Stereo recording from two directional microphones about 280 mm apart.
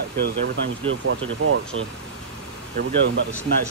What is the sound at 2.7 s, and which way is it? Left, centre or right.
Speech, right.